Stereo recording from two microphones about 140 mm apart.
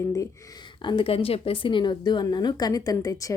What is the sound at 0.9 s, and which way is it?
Speech, 40° left (ahead or behind).